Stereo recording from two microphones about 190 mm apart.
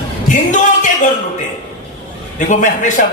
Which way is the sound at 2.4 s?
40° left (ahead or behind).